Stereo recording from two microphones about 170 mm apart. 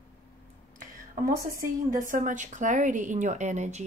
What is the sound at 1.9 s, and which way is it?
A woman's voice, 50° right (ahead or behind).